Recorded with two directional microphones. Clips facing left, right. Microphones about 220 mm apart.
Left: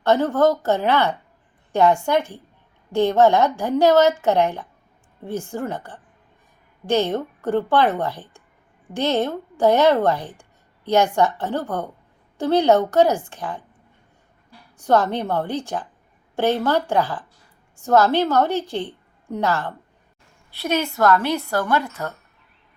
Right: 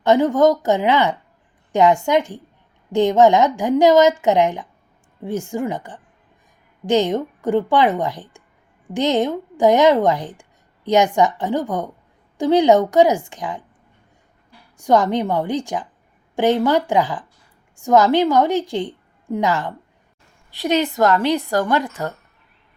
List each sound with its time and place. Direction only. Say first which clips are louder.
0.0 s a woman's voice: right 3 dB; 15° right (ahead or behind)
14.8 s a woman's voice: right 3 dB; 15° right (ahead or behind)